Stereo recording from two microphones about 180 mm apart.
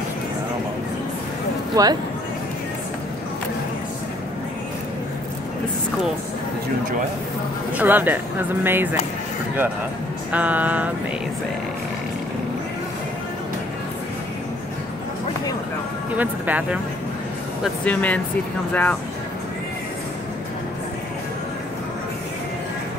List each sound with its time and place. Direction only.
1.8 s speech: 20° right (ahead or behind)
7.7 s speech: 10° right (ahead or behind)
10.3 s speech: 10° right (ahead or behind)
16.2 s speech: 10° right (ahead or behind)
17.8 s speech: 10° left (ahead or behind)